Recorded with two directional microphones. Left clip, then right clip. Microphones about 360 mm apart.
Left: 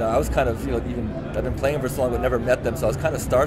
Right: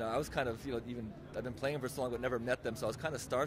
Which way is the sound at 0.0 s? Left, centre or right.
Right.